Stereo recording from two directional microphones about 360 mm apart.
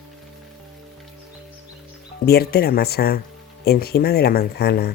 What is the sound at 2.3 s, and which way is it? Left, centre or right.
Speech, left.